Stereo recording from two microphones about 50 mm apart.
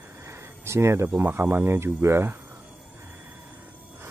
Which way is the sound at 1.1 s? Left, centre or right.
Right.